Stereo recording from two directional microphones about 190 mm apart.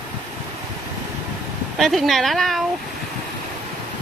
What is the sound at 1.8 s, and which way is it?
Speech, centre (ahead or behind).